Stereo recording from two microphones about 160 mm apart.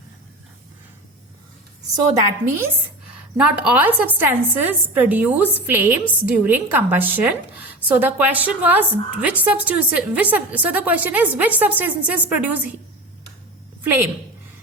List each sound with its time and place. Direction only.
2.1 s a woman's voice: 15° right (ahead or behind)
13.8 s a woman's voice: 15° right (ahead or behind)